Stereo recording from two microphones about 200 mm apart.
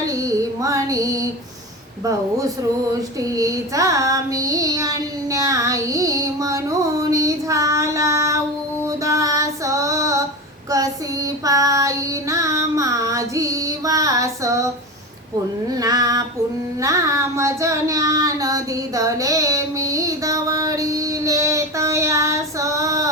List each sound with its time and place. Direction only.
0.0 s female singing: 15° right (ahead or behind)
3.2 s child singing: 15° right (ahead or behind)
11.4 s female singing: 15° right (ahead or behind)
15.7 s music: 20° right (ahead or behind)
16.8 s child singing: 15° right (ahead or behind)